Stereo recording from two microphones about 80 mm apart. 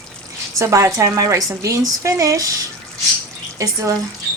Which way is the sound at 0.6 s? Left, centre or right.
Right.